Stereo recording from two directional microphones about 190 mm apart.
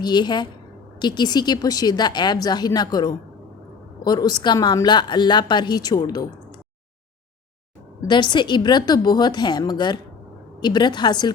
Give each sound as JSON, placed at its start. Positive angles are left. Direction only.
{"t": 0.0, "sound": "a woman's voice", "side_deg": 20}
{"t": 8.0, "sound": "a woman's voice", "side_deg": 25}